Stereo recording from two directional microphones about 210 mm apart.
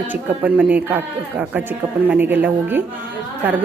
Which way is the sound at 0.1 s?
10° right (ahead or behind).